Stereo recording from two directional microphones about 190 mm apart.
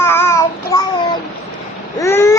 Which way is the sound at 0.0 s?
10° left (ahead or behind).